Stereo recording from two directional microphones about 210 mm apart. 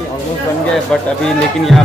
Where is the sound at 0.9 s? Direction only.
Centre (ahead or behind).